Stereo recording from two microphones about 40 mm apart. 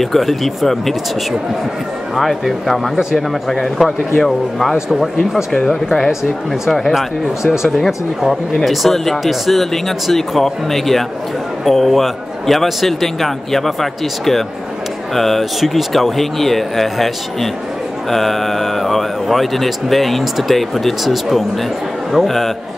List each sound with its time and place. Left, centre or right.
0.0 s a man's voice: centre
2.1 s a man's voice: centre
4.8 s speech: centre
6.7 s a man's voice: centre